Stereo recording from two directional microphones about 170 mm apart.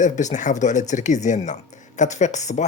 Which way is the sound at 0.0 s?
45° left (ahead or behind).